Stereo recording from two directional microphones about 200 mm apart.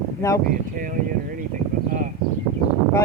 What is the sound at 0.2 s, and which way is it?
Speech, 15° left (ahead or behind).